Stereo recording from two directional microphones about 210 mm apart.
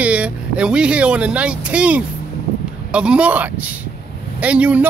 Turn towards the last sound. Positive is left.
turn(degrees=-5)  # may be behind; listen again after turning